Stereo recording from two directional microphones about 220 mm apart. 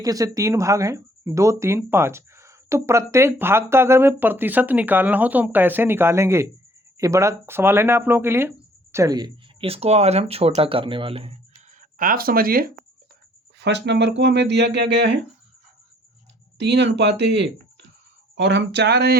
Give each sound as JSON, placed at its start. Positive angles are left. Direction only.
{"t": 0.0, "sound": "speech", "side_deg": -15}
{"t": 13.6, "sound": "speech", "side_deg": -50}
{"t": 16.6, "sound": "speech", "side_deg": -50}